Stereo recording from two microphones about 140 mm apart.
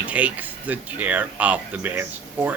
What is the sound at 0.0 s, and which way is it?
Speech, 10° right (ahead or behind).